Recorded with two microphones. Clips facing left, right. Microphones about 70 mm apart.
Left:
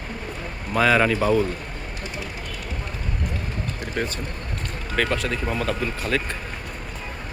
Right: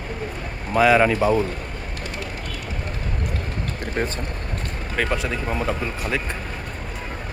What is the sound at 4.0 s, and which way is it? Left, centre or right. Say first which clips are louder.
Speech: right 2 dB; right.